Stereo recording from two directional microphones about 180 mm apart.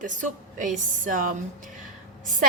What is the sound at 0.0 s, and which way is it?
A woman's voice, 45° right (ahead or behind).